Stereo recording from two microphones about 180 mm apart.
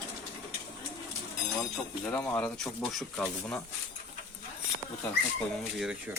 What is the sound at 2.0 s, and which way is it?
Speech, 10° left (ahead or behind).